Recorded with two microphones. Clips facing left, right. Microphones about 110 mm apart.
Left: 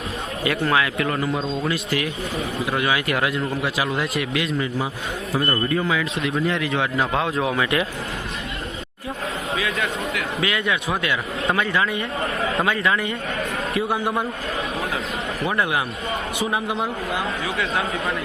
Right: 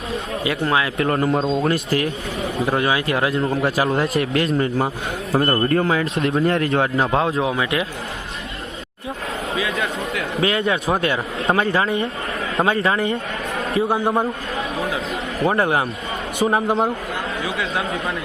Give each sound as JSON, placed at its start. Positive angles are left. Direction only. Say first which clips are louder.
{"t": 0.4, "sound": "a man's voice", "louder": "even", "side_deg": -25}
{"t": 3.5, "sound": "speech", "louder": "right 5 dB", "side_deg": -45}
{"t": 5.6, "sound": "speech", "louder": "right 4 dB", "side_deg": -55}
{"t": 6.2, "sound": "speech", "louder": "right 6 dB", "side_deg": -45}
{"t": 7.5, "sound": "a man's voice", "louder": "even", "side_deg": -20}
{"t": 9.6, "sound": "a sound", "louder": "right 2 dB", "side_deg": -30}
{"t": 10.4, "sound": "speech", "louder": "right 5 dB", "side_deg": -35}
{"t": 15.4, "sound": "a man's voice", "louder": "right 5 dB", "side_deg": -35}